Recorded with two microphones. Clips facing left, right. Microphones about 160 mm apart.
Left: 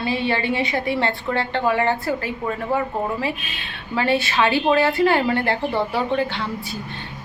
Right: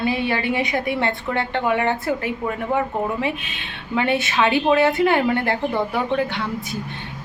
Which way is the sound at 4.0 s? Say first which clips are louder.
Even; 20° right (ahead or behind).